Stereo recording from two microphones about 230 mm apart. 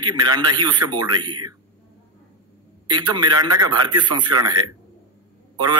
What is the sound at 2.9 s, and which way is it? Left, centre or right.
A man's voice, centre.